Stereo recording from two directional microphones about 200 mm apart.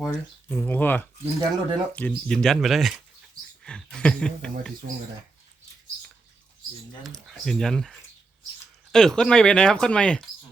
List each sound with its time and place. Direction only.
0.0 s speech: 10° left (ahead or behind)
1.2 s speech: 15° right (ahead or behind)
1.9 s speech: 5° left (ahead or behind)
7.0 s speech: centre (ahead or behind)